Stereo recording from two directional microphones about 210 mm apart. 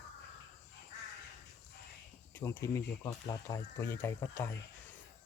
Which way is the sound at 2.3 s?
15° left (ahead or behind).